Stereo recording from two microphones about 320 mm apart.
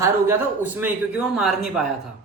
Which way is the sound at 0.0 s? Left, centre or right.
Centre.